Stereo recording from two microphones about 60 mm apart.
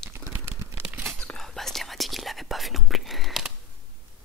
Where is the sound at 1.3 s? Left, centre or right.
Centre.